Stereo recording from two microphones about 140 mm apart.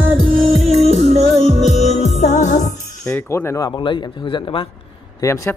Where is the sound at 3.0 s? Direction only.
15° left (ahead or behind).